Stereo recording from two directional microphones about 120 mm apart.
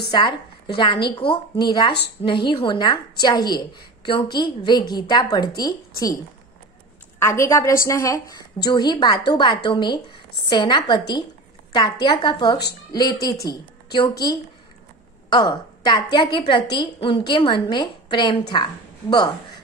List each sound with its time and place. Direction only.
0.1 s a woman's voice: 40° left (ahead or behind)
7.2 s a woman's voice: 25° left (ahead or behind)